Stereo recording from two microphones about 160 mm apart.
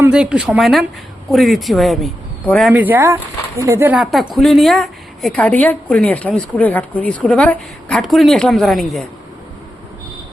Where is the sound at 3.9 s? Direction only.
5° right (ahead or behind).